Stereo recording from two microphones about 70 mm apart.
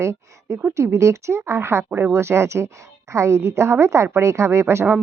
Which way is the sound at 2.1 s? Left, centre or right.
Right.